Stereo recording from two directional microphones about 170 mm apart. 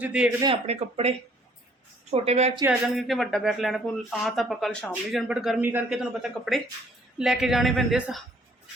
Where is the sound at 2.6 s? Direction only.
Centre (ahead or behind).